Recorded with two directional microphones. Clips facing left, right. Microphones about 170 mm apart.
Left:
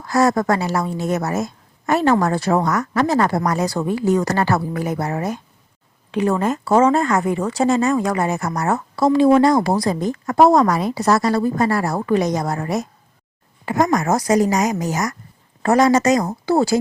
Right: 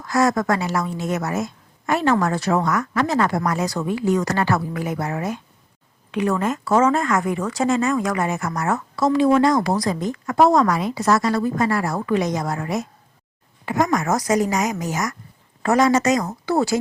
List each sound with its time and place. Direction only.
0.0 s speech: 35° left (ahead or behind)